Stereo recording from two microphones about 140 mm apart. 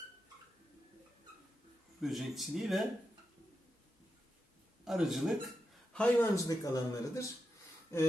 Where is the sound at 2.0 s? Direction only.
Centre (ahead or behind).